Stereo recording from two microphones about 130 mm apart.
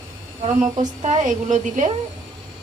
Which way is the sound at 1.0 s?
70° right (ahead or behind).